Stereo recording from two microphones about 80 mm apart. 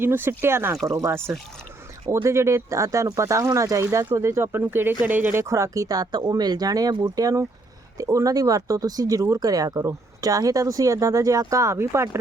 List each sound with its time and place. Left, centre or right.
0.0 s speech: right
0.9 s speech: right
2.2 s speech: right
5.5 s speech: right